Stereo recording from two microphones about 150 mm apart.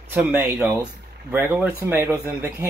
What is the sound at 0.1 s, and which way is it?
Speech, 10° right (ahead or behind).